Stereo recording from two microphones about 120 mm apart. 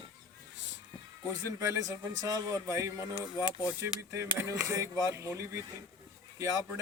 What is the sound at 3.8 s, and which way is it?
Speech, 25° right (ahead or behind).